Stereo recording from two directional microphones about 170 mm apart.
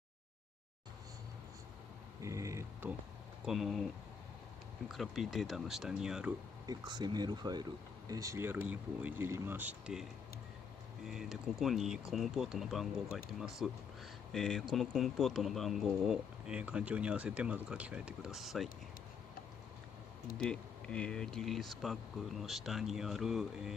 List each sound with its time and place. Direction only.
2.2 s speech: 20° right (ahead or behind)
3.4 s speech: centre (ahead or behind)
4.8 s speech: centre (ahead or behind)
6.6 s speech: 25° right (ahead or behind); by 10.0 s 5° right (ahead or behind)
11.1 s speech: centre (ahead or behind)
20.4 s speech: 5° left (ahead or behind)